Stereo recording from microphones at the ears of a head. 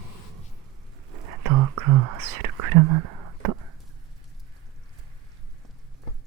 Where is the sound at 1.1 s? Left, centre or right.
Right.